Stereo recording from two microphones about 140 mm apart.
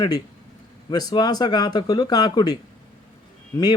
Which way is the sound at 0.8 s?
30° left (ahead or behind).